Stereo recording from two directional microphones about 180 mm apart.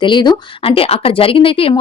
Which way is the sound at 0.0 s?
25° left (ahead or behind).